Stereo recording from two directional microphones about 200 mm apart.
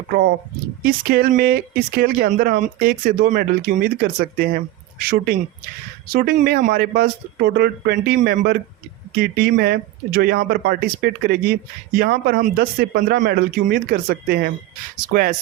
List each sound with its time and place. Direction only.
0.9 s a woman's voice: 50° right (ahead or behind)